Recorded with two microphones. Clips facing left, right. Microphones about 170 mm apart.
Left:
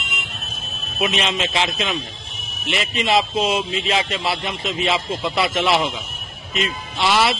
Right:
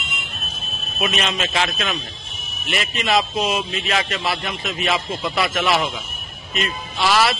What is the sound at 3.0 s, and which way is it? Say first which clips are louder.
Speech: left 1 dB; 25° left (ahead or behind).